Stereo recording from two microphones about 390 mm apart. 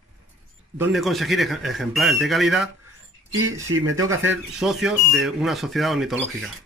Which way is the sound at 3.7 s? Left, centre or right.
Right.